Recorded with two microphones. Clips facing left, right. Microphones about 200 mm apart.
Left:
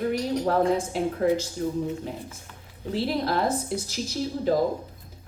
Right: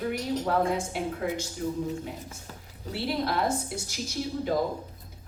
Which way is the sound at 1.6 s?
40° left (ahead or behind).